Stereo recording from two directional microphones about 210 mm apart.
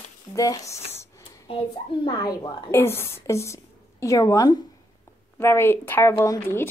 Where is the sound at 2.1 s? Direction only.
20° left (ahead or behind).